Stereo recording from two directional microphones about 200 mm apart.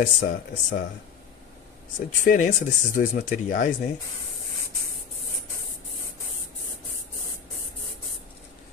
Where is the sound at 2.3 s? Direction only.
40° left (ahead or behind).